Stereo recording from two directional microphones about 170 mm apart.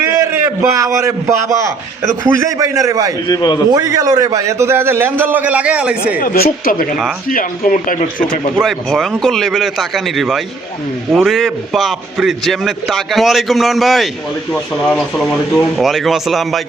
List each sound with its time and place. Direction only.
0.2 s a man's voice: 15° right (ahead or behind)
3.2 s a man's voice: 25° left (ahead or behind)
3.7 s a man's voice: 20° right (ahead or behind)
6.1 s speech: 60° left (ahead or behind)
8.5 s a man's voice: centre (ahead or behind)